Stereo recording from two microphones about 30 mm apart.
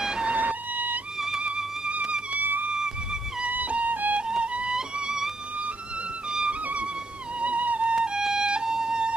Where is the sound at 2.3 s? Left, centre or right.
Right.